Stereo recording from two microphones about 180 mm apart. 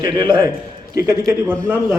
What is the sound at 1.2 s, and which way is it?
Speech, 5° left (ahead or behind).